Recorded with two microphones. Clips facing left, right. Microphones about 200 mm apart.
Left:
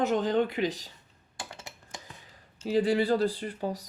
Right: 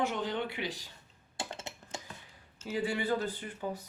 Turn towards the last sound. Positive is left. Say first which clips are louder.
# left 5 dB
turn(degrees=35)  # may be behind; listen again after turning